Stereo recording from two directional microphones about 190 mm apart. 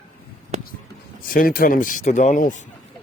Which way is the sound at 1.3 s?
50° left (ahead or behind).